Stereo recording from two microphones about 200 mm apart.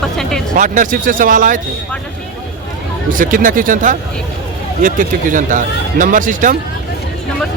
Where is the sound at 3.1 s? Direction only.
40° right (ahead or behind).